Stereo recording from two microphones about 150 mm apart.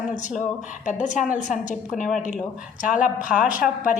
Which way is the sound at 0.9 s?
55° left (ahead or behind).